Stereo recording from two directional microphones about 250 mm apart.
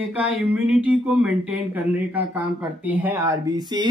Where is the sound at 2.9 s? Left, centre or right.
Centre.